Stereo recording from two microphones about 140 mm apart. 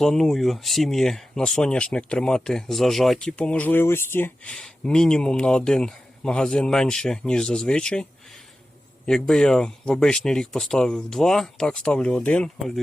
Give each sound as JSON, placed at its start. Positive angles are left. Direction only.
{"t": 0.0, "sound": "speech", "side_deg": 5}
{"t": 9.0, "sound": "speech", "side_deg": 5}